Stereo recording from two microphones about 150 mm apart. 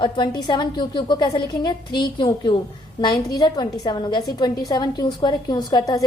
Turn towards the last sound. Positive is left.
turn(degrees=25)  # may be behind; listen again after turning